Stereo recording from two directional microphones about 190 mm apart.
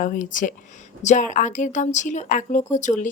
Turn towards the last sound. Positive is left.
turn(degrees=40)  # may be behind; listen again after turning